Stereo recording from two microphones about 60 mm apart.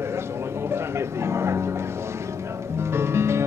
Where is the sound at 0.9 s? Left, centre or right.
Right.